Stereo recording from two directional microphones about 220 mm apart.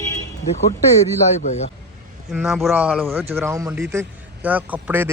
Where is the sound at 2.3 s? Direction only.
Centre (ahead or behind).